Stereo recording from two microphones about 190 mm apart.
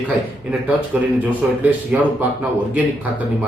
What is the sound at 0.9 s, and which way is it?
Speech, 5° right (ahead or behind).